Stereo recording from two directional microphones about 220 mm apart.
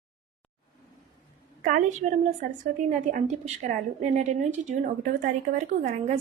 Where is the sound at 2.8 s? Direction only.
35° right (ahead or behind).